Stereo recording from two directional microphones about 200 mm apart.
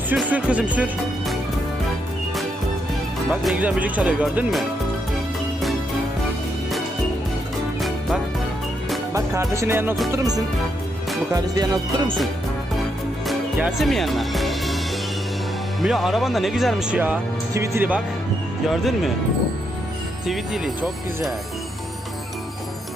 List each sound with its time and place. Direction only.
0.2 s speech: 5° right (ahead or behind)
3.4 s speech: 5° right (ahead or behind)
7.8 s music: centre (ahead or behind)
9.1 s speech: 15° right (ahead or behind)
13.2 s music: 5° right (ahead or behind)
15.8 s speech: centre (ahead or behind)
20.2 s speech: centre (ahead or behind)